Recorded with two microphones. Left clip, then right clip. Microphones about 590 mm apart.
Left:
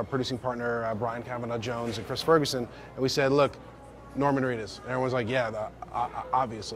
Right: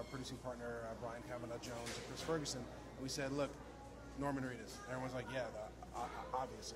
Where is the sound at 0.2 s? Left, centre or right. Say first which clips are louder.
Left 17 dB; left.